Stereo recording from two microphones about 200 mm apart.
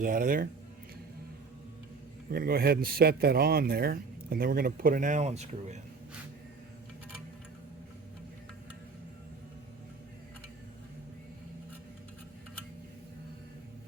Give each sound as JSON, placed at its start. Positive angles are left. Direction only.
{"t": 0.0, "sound": "a man's voice", "side_deg": -45}
{"t": 2.3, "sound": "a man's voice", "side_deg": -50}